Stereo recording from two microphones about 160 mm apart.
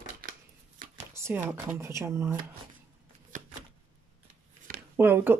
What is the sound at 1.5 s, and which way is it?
Speech, 15° right (ahead or behind).